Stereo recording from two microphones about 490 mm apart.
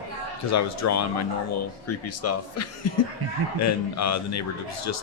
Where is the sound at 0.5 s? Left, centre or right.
Left.